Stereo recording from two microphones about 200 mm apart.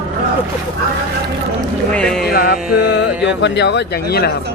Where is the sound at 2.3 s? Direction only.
50° left (ahead or behind).